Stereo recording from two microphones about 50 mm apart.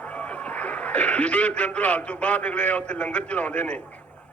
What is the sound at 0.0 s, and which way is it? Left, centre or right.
A man's voice, left.